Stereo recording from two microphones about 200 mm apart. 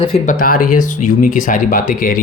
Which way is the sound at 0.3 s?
45° left (ahead or behind).